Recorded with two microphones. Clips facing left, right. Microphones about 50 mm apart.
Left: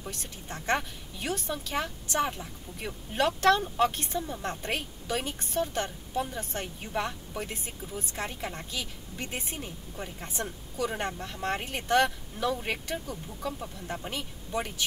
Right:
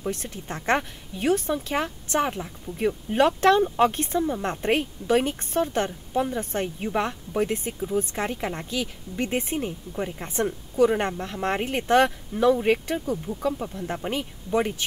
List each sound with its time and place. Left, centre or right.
0.0 s speech: right